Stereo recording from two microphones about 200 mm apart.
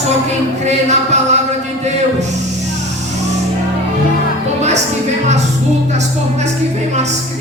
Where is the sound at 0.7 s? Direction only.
35° right (ahead or behind).